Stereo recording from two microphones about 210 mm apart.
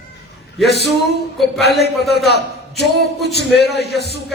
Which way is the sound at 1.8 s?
50° left (ahead or behind).